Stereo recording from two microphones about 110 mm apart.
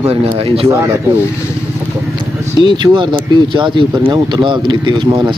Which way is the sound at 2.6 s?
45° right (ahead or behind).